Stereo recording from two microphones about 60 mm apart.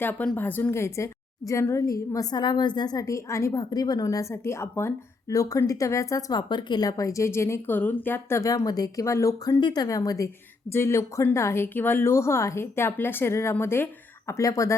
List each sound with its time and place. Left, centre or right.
0.0 s speech: left
0.7 s a woman's voice: left
1.7 s a woman's voice: left
3.5 s a woman's voice: left
5.3 s speech: left
7.3 s a woman's voice: left
7.7 s speech: left
8.4 s speech: left
10.7 s speech: left
11.5 s a woman's voice: left
14.3 s a woman's voice: left